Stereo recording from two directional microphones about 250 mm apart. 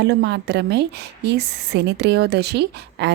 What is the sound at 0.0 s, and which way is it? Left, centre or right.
A woman's voice, right.